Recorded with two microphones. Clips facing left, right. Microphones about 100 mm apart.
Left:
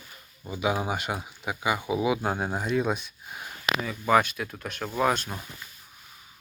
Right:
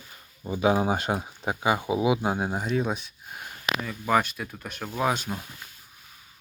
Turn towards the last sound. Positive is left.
turn(degrees=-5)  # may be behind; listen again after turning